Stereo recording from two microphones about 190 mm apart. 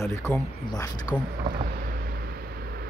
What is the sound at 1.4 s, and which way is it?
Vehicle, 50° right (ahead or behind).